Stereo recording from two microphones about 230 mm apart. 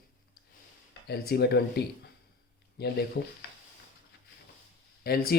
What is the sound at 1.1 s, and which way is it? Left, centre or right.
Speech, left.